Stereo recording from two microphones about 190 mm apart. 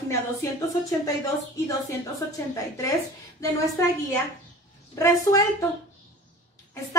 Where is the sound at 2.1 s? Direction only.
15° left (ahead or behind).